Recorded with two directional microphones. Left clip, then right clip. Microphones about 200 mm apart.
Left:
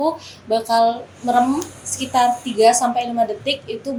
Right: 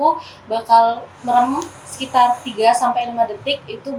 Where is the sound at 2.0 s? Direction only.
35° left (ahead or behind).